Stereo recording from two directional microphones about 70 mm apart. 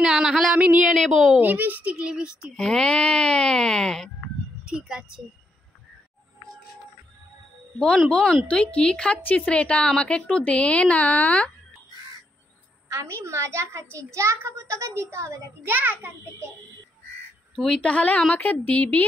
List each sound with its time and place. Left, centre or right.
0.0 s a sound: centre
1.4 s a child's voice: right
2.0 s speech: centre
2.5 s a woman's voice: centre
4.6 s speech: centre
8.1 s a woman's voice: centre
9.2 s a woman's voice: left
12.9 s a child's voice: right
15.7 s a child's voice: right
17.6 s a woman's voice: centre